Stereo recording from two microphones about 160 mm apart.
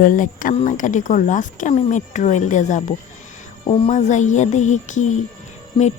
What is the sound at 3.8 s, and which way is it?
Speech, 50° left (ahead or behind).